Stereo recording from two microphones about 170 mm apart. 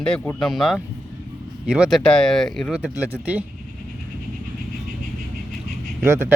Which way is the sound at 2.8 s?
5° right (ahead or behind).